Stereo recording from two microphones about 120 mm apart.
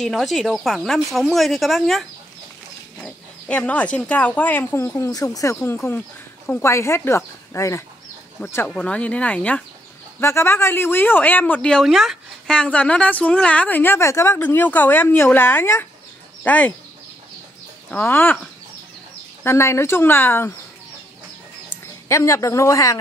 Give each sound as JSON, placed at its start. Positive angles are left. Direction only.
{"t": 0.0, "sound": "speech", "side_deg": 0}
{"t": 17.9, "sound": "speech", "side_deg": 15}
{"t": 19.4, "sound": "speech", "side_deg": 20}
{"t": 22.0, "sound": "speech", "side_deg": 25}